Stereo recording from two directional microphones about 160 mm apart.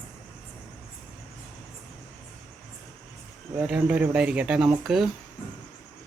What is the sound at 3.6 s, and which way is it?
Speech, 5° right (ahead or behind).